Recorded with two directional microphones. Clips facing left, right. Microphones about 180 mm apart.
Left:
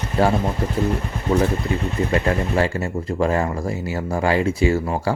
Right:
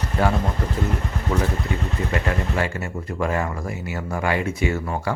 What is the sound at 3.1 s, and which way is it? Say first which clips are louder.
Speech: left 4 dB; 30° left (ahead or behind).